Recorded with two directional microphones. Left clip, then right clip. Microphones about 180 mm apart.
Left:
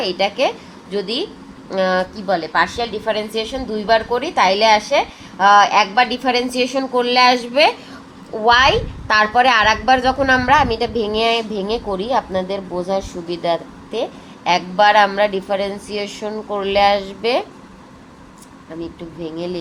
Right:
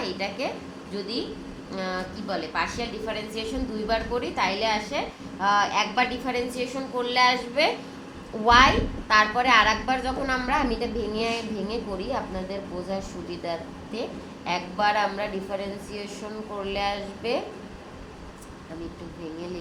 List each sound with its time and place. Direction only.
0.0 s a woman's voice: 60° left (ahead or behind)